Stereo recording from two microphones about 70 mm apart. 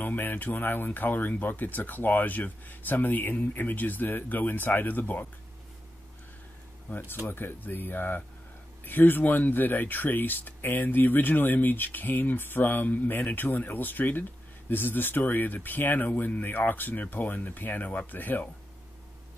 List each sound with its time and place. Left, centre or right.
0.0 s speech: left
6.9 s speech: left